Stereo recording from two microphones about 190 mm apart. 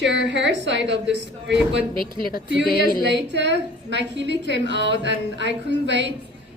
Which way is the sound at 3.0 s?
65° right (ahead or behind).